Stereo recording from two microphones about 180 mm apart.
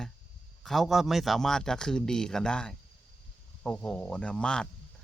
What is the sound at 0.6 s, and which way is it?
A man's voice, centre (ahead or behind).